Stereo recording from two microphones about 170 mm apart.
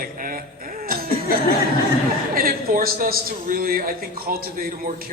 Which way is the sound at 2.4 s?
60° right (ahead or behind).